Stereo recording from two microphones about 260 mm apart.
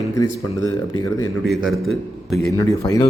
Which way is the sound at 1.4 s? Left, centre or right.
Centre.